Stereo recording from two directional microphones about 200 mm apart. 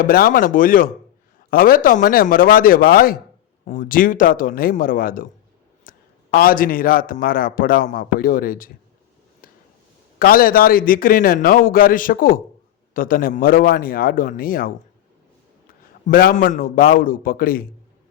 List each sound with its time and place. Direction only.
0.0 s a man's voice: 45° left (ahead or behind)
5.9 s clicking: 45° left (ahead or behind)
6.3 s a man's voice: 45° left (ahead or behind)
9.4 s a sound: 45° left (ahead or behind)
10.2 s a man's voice: 45° left (ahead or behind)
16.0 s a man's voice: 45° left (ahead or behind)